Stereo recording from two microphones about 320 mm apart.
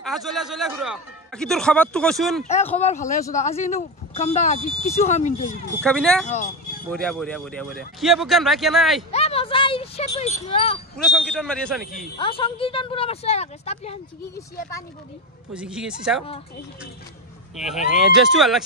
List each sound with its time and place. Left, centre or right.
0.0 s speech: centre
2.4 s speech: centre
5.8 s speech: centre
6.2 s speech: left
6.9 s speech: centre
9.1 s speech: centre
11.1 s speech: centre
12.2 s speech: centre
15.5 s speech: centre
17.6 s speech: centre